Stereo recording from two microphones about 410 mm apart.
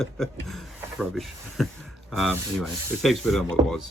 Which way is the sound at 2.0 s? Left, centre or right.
Centre.